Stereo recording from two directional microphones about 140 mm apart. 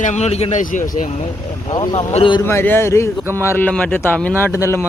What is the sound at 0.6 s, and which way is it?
Speech, 70° left (ahead or behind).